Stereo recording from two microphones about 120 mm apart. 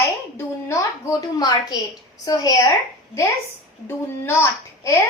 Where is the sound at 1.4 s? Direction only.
35° left (ahead or behind).